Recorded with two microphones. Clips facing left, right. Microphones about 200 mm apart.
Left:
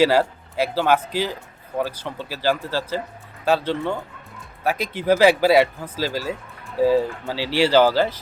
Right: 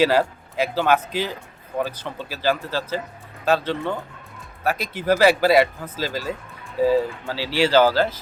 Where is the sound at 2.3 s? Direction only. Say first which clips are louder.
Left 1 dB; 10° left (ahead or behind).